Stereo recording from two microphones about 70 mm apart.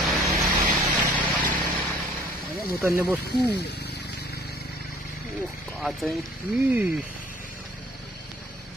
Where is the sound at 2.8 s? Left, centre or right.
Right.